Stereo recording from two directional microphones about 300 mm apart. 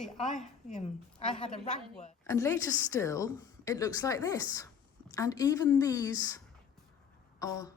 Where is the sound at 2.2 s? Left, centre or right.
Centre.